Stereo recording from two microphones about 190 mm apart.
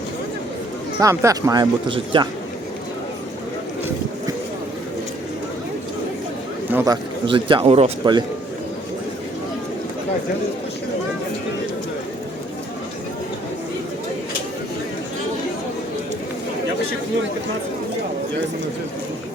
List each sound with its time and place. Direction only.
0.9 s speech: 15° right (ahead or behind)
6.7 s a man's voice: 15° right (ahead or behind)